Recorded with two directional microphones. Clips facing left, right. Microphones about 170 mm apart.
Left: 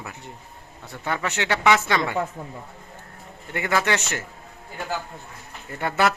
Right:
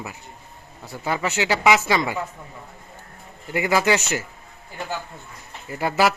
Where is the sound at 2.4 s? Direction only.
35° left (ahead or behind).